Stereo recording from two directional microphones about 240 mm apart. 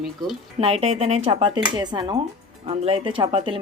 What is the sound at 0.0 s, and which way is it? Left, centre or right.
Speech, centre.